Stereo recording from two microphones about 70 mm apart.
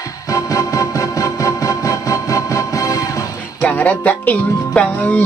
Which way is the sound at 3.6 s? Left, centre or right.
Left.